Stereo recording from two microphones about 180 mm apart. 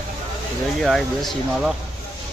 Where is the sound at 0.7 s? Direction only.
Centre (ahead or behind).